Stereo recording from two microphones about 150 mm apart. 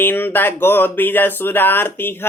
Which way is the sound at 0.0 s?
15° left (ahead or behind).